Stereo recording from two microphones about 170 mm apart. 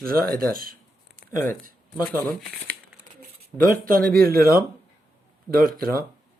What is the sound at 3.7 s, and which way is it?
Speech, 55° right (ahead or behind).